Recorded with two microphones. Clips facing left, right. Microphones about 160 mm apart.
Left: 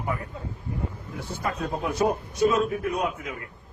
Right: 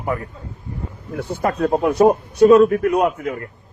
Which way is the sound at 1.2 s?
60° right (ahead or behind).